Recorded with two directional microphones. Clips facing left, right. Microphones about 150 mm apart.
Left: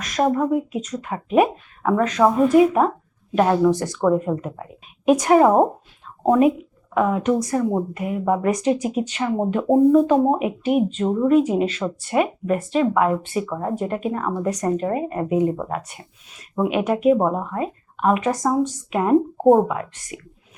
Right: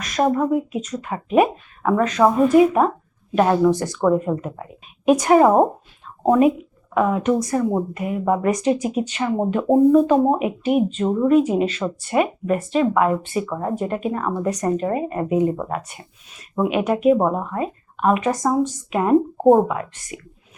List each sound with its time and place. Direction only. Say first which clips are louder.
0.0 s speech: right 1 dB; 15° right (ahead or behind)